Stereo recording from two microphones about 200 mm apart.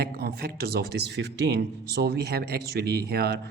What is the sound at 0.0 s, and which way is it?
Speech, 50° right (ahead or behind).